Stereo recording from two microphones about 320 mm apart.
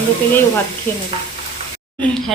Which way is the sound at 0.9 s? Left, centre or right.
Centre.